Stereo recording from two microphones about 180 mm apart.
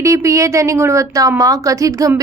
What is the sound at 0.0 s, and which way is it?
A woman's voice, 15° right (ahead or behind).